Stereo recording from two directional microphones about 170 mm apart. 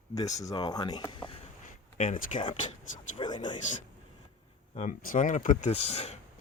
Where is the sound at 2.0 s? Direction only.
45° left (ahead or behind).